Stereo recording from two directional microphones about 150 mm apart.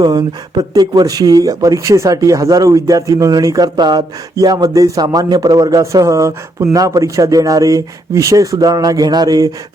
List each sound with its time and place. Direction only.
0.0 s speech: 30° right (ahead or behind)